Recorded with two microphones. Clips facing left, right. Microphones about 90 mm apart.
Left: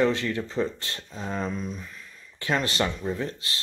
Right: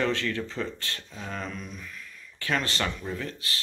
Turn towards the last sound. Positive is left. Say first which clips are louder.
# left 4 dB
turn(degrees=25)  # may be behind; listen again after turning